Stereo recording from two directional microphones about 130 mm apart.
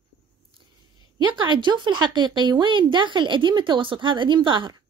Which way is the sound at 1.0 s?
35° right (ahead or behind).